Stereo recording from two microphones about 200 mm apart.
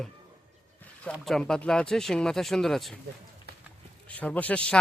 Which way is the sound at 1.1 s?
Centre (ahead or behind).